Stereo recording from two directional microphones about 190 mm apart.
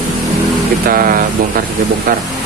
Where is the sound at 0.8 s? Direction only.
50° right (ahead or behind).